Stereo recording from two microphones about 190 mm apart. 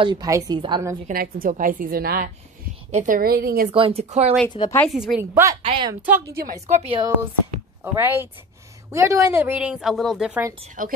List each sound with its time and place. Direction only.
0.0 s a woman's voice: 20° right (ahead or behind)
1.0 s a woman's voice: 50° right (ahead or behind)
3.7 s speech: 30° right (ahead or behind)
4.5 s speech: 25° left (ahead or behind)
4.7 s a woman's voice: centre (ahead or behind)
5.3 s a woman's voice: 15° right (ahead or behind)
5.6 s a sound: 25° right (ahead or behind)
6.2 s a woman's voice: 55° right (ahead or behind)
6.7 s a woman's voice: 30° right (ahead or behind)
7.8 s a woman's voice: 10° right (ahead or behind)
10.8 s a woman's voice: 45° right (ahead or behind)